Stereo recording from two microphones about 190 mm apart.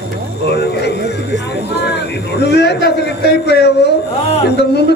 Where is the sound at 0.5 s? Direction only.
60° left (ahead or behind).